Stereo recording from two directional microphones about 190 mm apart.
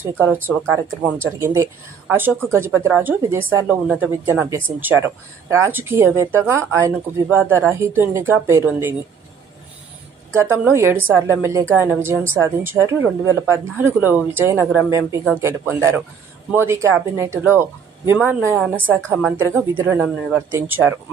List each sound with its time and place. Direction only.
0.0 s speech: 10° right (ahead or behind)
10.5 s speech: 10° right (ahead or behind)
18.9 s a woman's voice: 10° left (ahead or behind)
19.8 s speech: 10° right (ahead or behind)